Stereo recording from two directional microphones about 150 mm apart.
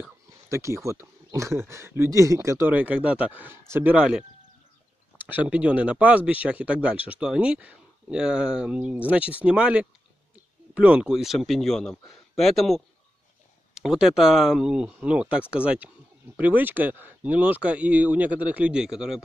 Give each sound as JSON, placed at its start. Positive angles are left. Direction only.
{"t": 0.0, "sound": "speech", "side_deg": -20}
{"t": 2.7, "sound": "a man's voice", "side_deg": -10}